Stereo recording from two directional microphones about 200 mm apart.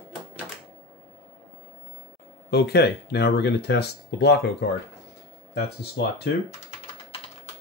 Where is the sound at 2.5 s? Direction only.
55° left (ahead or behind).